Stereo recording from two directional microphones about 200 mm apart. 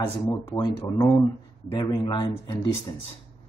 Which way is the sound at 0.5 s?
20° left (ahead or behind).